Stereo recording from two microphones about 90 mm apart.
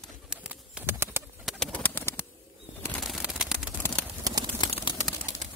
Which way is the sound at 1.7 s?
20° left (ahead or behind).